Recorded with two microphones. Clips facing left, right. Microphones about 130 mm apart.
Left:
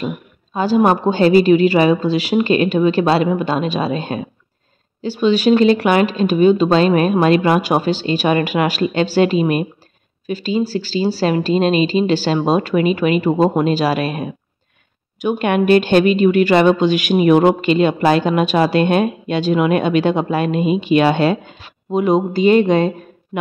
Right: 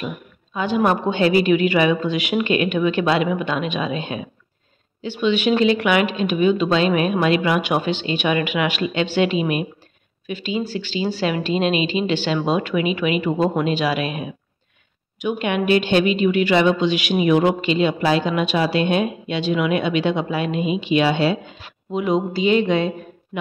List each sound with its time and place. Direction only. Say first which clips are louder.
0.0 s a woman's voice: left 5 dB; 35° left (ahead or behind)